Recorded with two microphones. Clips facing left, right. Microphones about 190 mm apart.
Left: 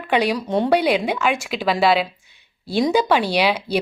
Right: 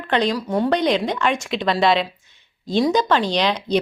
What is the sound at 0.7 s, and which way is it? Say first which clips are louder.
A woman's voice: left 2 dB; 10° left (ahead or behind).